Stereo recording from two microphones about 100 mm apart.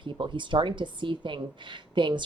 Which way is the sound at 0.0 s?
55° right (ahead or behind).